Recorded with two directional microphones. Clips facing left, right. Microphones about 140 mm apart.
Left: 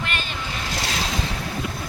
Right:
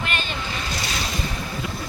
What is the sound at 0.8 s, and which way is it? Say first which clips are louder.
Ocean: left 2 dB; 90° left.